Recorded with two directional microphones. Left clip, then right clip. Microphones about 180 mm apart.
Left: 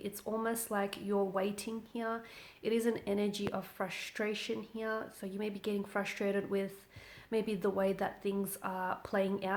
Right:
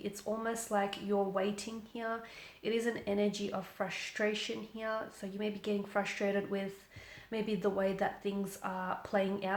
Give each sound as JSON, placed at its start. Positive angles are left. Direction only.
{"t": 0.0, "sound": "speech", "side_deg": 45}